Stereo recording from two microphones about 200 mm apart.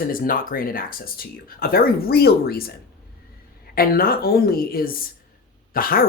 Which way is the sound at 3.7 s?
45° left (ahead or behind).